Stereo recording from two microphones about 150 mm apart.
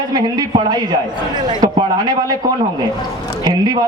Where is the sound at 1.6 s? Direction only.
25° right (ahead or behind).